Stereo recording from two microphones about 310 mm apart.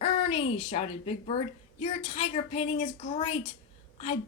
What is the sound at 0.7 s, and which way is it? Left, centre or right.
Speech, left.